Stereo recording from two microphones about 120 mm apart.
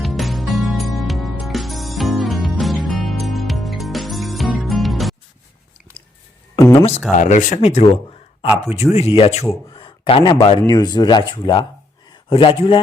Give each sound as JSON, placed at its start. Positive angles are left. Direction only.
{"t": 0.0, "sound": "music", "side_deg": 0}
{"t": 6.0, "sound": "chewing", "side_deg": 10}
{"t": 6.7, "sound": "speech", "side_deg": 60}
{"t": 7.2, "sound": "a man's voice", "side_deg": 90}